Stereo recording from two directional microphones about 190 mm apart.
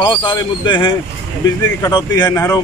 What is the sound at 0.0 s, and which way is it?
Speech, 25° left (ahead or behind).